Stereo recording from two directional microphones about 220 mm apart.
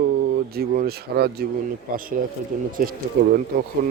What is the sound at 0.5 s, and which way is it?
Speech, 40° right (ahead or behind).